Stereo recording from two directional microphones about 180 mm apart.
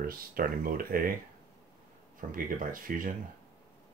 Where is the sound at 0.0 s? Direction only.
55° right (ahead or behind).